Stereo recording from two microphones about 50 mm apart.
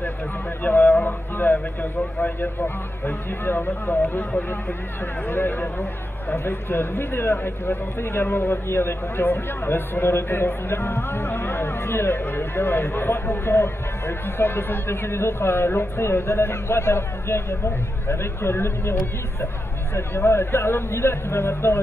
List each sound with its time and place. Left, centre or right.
0.7 s music: left
1.4 s a man's voice: left
5.3 s a man's voice: left